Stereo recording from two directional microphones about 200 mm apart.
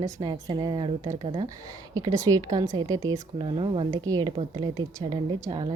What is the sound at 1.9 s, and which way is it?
A woman's voice, 15° right (ahead or behind).